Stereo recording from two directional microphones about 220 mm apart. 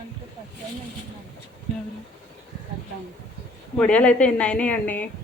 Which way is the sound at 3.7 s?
5° left (ahead or behind).